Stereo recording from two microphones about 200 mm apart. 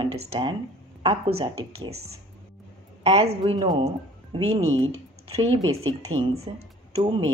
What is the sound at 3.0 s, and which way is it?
Speech, 30° right (ahead or behind).